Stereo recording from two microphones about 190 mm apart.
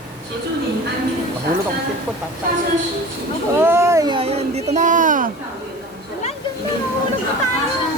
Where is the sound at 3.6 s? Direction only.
15° right (ahead or behind); by 5.3 s 45° right (ahead or behind).